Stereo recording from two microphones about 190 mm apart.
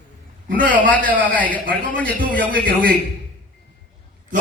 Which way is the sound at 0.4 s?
45° right (ahead or behind).